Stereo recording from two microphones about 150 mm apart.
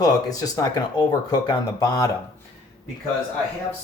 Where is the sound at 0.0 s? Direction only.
25° left (ahead or behind).